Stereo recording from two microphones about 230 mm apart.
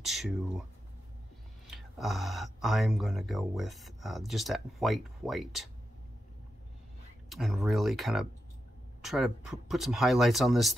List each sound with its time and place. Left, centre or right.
0.0 s speech: centre
1.7 s speech: centre
7.2 s speech: centre